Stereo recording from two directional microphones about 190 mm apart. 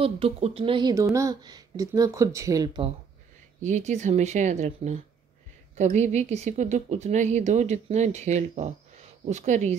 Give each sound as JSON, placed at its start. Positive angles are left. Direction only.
{"t": 0.0, "sound": "speech", "side_deg": -30}
{"t": 3.6, "sound": "a woman's voice", "side_deg": -40}